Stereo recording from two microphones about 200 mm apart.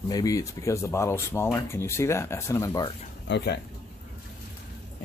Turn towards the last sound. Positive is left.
turn(degrees=55)  # may be behind; listen again after turning